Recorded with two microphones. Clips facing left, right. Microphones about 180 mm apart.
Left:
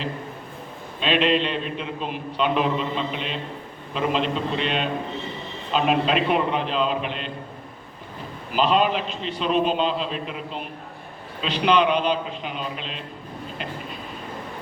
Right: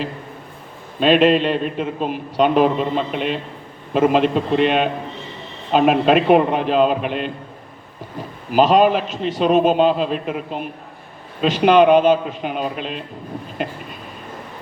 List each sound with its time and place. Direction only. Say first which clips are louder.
0.9 s a man's voice: right 7 dB; 45° right (ahead or behind)
8.5 s a man's voice: right 7 dB; 45° right (ahead or behind)